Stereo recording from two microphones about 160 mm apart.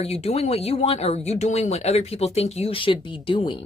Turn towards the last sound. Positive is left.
turn(degrees=35)  # may be behind; listen again after turning